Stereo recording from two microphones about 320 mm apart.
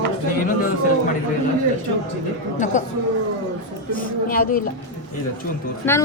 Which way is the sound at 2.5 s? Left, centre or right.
Left.